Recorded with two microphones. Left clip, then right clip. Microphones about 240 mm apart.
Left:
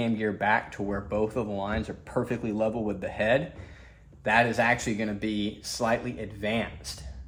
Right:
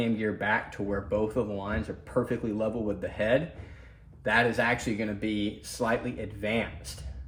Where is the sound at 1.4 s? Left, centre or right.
Centre.